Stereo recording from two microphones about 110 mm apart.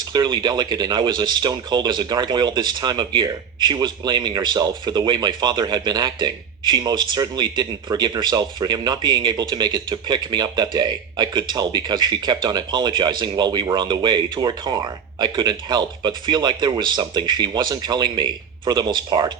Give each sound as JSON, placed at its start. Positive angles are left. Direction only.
{"t": 0.0, "sound": "speech", "side_deg": -40}